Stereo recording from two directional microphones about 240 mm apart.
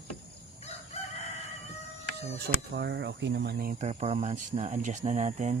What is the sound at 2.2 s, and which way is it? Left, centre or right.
Speech, right.